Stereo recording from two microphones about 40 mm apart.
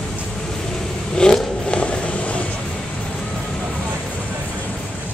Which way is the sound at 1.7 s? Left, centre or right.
Left.